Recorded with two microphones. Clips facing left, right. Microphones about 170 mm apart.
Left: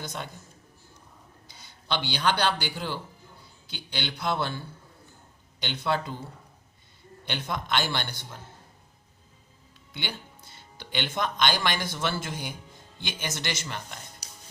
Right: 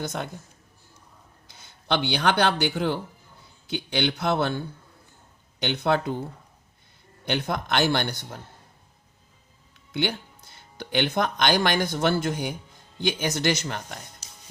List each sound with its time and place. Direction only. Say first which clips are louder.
0.0 s speech: right 6 dB; 50° right (ahead or behind)
1.5 s speech: right 6 dB; 55° right (ahead or behind)
5.6 s speech: right 5 dB; 55° right (ahead or behind)
7.3 s speech: right 4 dB; 50° right (ahead or behind)
9.9 s speech: right 10 dB; 50° right (ahead or behind)